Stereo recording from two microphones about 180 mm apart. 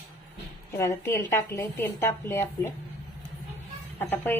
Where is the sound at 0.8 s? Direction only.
15° left (ahead or behind).